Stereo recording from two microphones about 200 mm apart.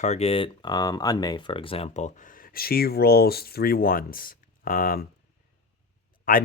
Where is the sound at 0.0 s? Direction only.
30° left (ahead or behind).